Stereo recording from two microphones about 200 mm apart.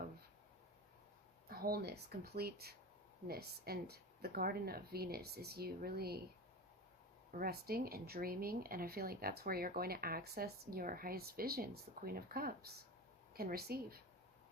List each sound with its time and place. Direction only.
1.5 s speech: 50° right (ahead or behind)
7.3 s speech: 50° right (ahead or behind)